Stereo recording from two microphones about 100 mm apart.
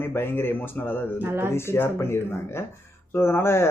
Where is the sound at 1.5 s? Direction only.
25° left (ahead or behind).